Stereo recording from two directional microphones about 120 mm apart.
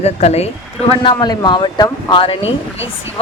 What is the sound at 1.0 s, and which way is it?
Speech, 40° left (ahead or behind).